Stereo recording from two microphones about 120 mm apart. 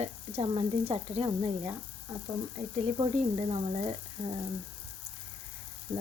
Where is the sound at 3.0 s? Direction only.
55° right (ahead or behind).